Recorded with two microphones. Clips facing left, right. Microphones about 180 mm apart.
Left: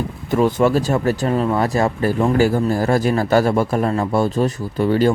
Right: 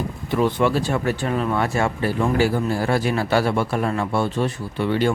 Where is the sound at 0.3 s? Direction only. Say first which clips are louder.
Left 4 dB; 45° left (ahead or behind).